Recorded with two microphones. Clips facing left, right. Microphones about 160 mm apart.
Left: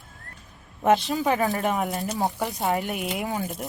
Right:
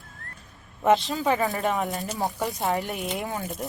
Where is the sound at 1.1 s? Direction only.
15° left (ahead or behind).